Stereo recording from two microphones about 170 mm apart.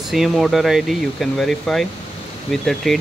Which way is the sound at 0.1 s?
Centre (ahead or behind).